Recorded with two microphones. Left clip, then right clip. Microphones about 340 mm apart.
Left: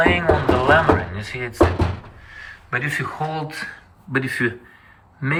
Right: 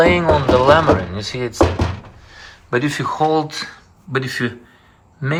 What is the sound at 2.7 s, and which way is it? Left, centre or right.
Speech, centre.